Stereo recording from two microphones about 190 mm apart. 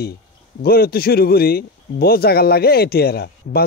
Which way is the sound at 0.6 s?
55° left (ahead or behind).